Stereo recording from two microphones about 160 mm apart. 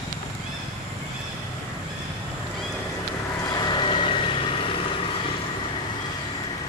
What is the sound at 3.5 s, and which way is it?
Vehicle, 25° left (ahead or behind).